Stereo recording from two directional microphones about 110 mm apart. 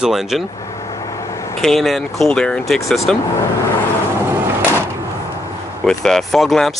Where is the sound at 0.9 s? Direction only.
30° left (ahead or behind).